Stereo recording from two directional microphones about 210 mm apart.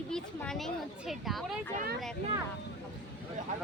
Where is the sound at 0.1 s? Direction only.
5° left (ahead or behind).